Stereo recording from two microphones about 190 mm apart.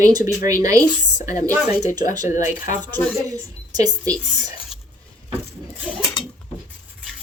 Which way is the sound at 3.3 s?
20° right (ahead or behind).